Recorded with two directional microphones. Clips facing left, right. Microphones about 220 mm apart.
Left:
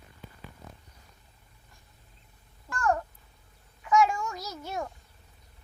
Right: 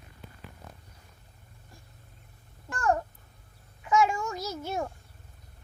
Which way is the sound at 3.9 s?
25° right (ahead or behind).